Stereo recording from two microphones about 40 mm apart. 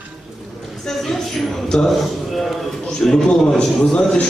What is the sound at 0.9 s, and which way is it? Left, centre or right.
A man's voice, centre.